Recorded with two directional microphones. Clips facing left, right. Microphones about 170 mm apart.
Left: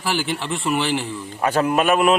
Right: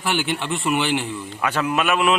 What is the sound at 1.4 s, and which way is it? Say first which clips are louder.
Speech: left 4 dB; 40° left (ahead or behind).